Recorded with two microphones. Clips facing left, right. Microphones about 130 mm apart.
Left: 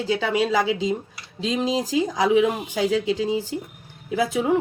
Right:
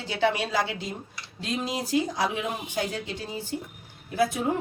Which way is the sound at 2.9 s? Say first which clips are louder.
Left 12 dB; 90° left.